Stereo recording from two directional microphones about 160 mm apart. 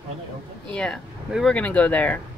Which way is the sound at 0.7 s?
5° left (ahead or behind).